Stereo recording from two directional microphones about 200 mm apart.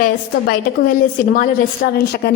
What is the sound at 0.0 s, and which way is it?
A woman's voice, 45° left (ahead or behind).